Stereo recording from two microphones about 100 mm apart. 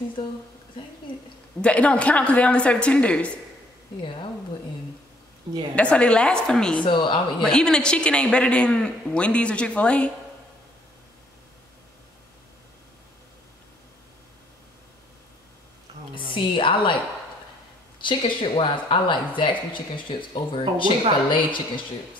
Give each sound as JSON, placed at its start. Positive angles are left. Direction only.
{"t": 1.6, "sound": "speech", "side_deg": 10}
{"t": 4.0, "sound": "speech", "side_deg": 55}
{"t": 5.8, "sound": "speech", "side_deg": 10}
{"t": 6.8, "sound": "speech", "side_deg": 55}
{"t": 7.4, "sound": "speech", "side_deg": 5}
{"t": 16.3, "sound": "a woman's voice", "side_deg": 55}
{"t": 18.0, "sound": "speech", "side_deg": 55}